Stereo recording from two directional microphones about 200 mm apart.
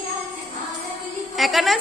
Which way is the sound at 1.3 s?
Centre (ahead or behind).